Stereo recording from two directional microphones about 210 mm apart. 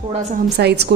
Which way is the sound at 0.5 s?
50° right (ahead or behind).